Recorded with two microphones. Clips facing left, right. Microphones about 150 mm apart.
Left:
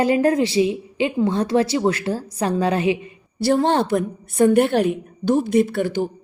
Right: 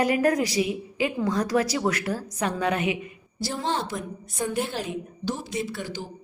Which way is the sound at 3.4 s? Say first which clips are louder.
Left 11 dB; 60° left (ahead or behind).